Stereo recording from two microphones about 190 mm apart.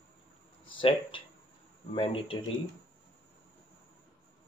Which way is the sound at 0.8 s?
25° left (ahead or behind).